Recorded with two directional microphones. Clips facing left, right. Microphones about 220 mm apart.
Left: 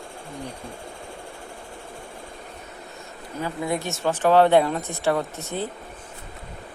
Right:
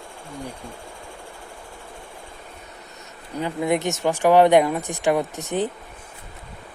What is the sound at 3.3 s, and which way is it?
Speech, 20° right (ahead or behind).